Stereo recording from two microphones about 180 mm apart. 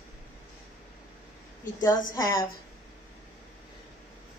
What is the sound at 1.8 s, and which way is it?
Speech, 15° left (ahead or behind).